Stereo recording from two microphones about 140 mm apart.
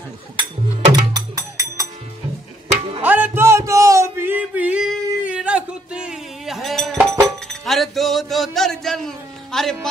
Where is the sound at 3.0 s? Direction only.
10° right (ahead or behind).